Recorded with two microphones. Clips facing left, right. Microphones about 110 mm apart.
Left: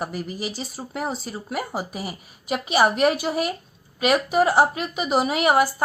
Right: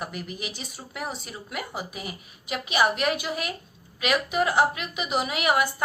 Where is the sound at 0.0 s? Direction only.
35° left (ahead or behind).